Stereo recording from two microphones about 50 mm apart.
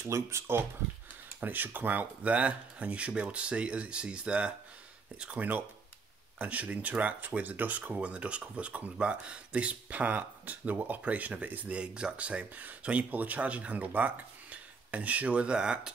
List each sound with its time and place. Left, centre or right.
0.0 s speech: right
1.4 s speech: right; by 4.6 s centre
6.3 s speech: right